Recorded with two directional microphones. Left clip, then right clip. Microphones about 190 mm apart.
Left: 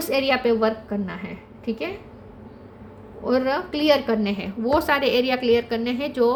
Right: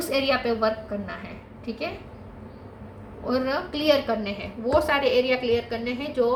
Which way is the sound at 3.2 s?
45° left (ahead or behind).